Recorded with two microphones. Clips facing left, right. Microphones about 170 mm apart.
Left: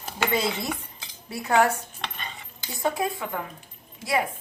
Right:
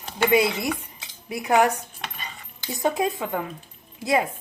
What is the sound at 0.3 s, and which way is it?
Dishes, 10° right (ahead or behind).